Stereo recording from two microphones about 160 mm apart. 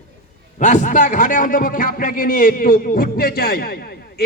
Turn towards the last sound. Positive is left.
turn(degrees=75)  # may be behind; listen again after turning